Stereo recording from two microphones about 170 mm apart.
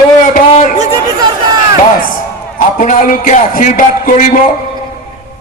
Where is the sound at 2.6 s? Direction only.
50° left (ahead or behind).